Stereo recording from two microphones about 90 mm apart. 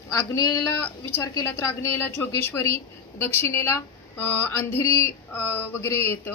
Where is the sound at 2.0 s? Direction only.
25° left (ahead or behind).